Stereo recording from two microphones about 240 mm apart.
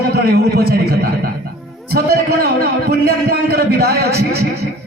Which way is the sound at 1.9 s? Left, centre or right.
Right.